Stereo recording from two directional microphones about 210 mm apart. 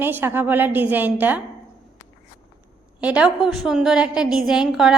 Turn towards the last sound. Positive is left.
turn(degrees=0)  # may be behind; listen again after turning